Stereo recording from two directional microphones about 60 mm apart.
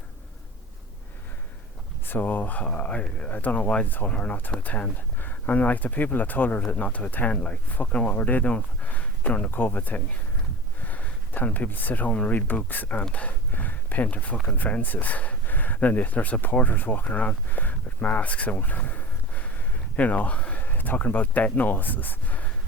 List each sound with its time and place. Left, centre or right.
2.0 s speech: left
9.5 s speech: left
12.5 s speech: left